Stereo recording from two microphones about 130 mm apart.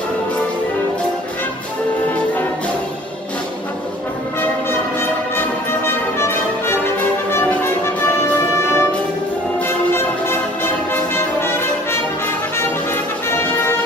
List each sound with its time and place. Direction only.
5.9 s music: 20° left (ahead or behind)
9.9 s music: 20° left (ahead or behind)